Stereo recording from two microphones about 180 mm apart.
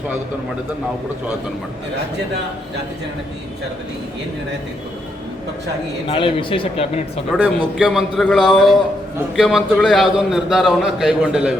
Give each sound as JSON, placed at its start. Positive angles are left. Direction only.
{"t": 6.1, "sound": "speech", "side_deg": 30}
{"t": 7.3, "sound": "a man's voice", "side_deg": -5}